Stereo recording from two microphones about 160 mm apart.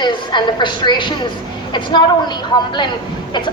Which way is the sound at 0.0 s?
30° left (ahead or behind).